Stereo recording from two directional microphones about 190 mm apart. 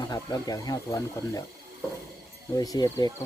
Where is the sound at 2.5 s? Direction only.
20° left (ahead or behind).